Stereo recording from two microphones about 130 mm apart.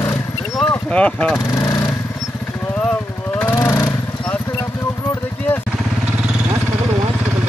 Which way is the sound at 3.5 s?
20° left (ahead or behind).